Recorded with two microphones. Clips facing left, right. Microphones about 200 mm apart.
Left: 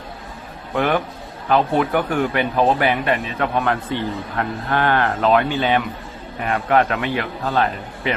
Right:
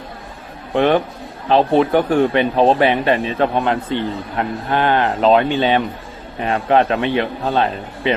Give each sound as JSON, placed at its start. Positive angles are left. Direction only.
{"t": 0.7, "sound": "speech", "side_deg": -25}